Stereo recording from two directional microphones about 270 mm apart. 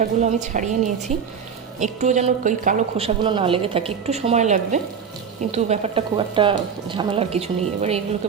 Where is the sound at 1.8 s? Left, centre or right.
Right.